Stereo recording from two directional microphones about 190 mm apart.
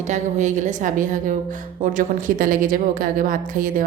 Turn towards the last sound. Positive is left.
turn(degrees=-45)  # may be behind; listen again after turning